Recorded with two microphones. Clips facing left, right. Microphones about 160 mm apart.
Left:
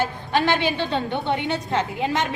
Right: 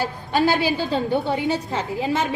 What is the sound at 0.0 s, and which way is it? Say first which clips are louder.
Speech: right 1 dB; 35° right (ahead or behind).